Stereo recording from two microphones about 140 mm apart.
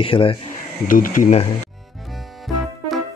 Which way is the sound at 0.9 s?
75° left (ahead or behind).